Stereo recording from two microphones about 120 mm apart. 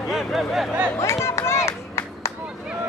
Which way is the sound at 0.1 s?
Centre (ahead or behind).